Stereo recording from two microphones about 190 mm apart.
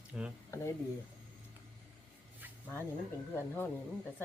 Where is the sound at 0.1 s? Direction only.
5° right (ahead or behind).